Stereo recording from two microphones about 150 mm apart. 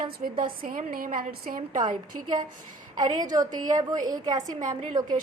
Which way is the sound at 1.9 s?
30° right (ahead or behind).